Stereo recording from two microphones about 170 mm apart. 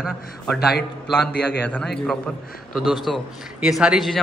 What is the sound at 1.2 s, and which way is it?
Speech, 75° left (ahead or behind).